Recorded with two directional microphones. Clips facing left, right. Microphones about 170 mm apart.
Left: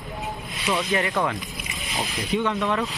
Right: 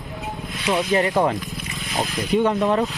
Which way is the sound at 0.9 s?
40° right (ahead or behind).